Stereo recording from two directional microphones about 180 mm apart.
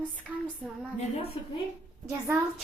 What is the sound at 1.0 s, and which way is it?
Speech, 35° left (ahead or behind).